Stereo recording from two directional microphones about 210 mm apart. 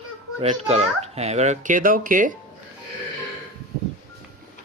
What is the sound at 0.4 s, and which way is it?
A child's voice, 30° right (ahead or behind).